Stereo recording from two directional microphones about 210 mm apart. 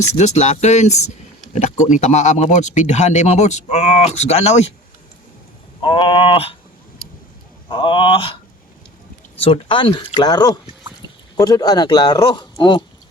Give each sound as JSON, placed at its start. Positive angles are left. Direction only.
{"t": 0.1, "sound": "speech", "side_deg": 35}
{"t": 5.8, "sound": "speech", "side_deg": 25}
{"t": 7.7, "sound": "speech", "side_deg": 25}